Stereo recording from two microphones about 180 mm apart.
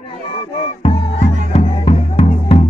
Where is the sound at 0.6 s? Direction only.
35° left (ahead or behind).